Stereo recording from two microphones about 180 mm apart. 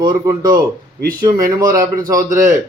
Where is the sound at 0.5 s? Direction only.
55° right (ahead or behind).